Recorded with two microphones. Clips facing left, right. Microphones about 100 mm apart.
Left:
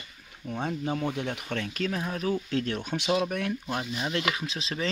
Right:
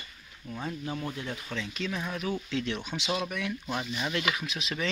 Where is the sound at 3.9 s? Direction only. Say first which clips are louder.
Left 2 dB; 30° left (ahead or behind).